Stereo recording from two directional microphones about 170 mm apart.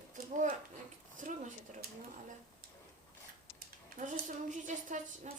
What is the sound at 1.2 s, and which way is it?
Speech, 50° right (ahead or behind).